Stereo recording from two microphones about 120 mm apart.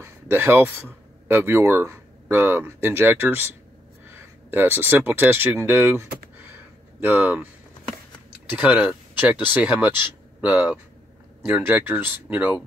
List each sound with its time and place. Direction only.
0.0 s speech: 20° right (ahead or behind)
8.5 s speech: 15° right (ahead or behind)